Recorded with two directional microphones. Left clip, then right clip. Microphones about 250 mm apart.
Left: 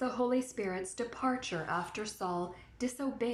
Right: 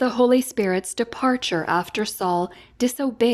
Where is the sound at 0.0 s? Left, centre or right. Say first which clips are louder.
Right 14 dB; right.